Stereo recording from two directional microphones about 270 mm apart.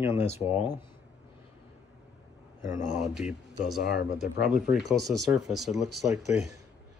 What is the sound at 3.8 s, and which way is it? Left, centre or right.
Speech, left.